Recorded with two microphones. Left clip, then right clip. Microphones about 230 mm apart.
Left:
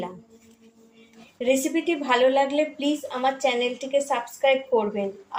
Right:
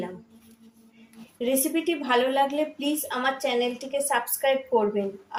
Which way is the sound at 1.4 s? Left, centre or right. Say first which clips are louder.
Left 3 dB; centre.